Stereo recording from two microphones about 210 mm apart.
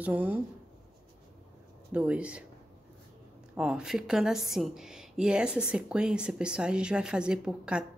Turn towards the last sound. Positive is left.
turn(degrees=-5)  # may be behind; listen again after turning